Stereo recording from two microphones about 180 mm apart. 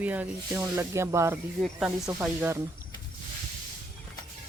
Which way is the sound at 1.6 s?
Centre (ahead or behind).